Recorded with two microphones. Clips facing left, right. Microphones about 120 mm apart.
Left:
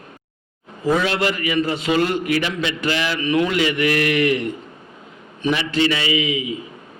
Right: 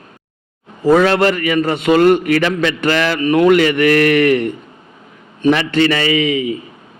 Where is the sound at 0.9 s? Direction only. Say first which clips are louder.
Right 8 dB; 60° right (ahead or behind).